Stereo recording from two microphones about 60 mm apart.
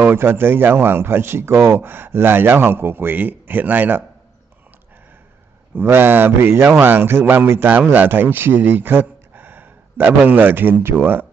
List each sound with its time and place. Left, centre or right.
0.1 s speech: right
5.8 s speech: right